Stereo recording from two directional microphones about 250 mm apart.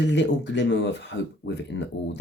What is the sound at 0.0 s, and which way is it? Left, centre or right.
Speech, left.